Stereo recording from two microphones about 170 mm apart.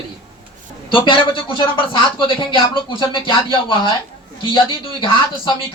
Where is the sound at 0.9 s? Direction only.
30° left (ahead or behind).